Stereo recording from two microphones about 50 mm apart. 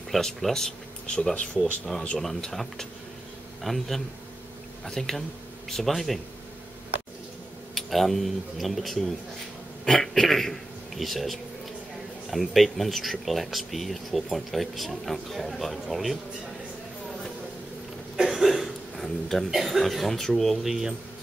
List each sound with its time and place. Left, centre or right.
0.1 s speech: centre; by 1.6 s left
2.1 s speech: centre
7.7 s a man's voice: centre
18.1 s a sound: centre
19.5 s speech: centre